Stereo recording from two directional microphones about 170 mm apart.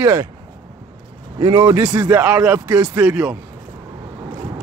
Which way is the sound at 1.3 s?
25° right (ahead or behind).